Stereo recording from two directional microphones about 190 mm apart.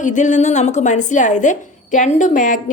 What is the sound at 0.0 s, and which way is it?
A woman's voice, 40° left (ahead or behind).